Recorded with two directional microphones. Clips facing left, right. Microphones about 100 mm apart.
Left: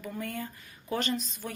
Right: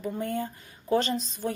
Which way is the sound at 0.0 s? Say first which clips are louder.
Right 6 dB; 25° right (ahead or behind).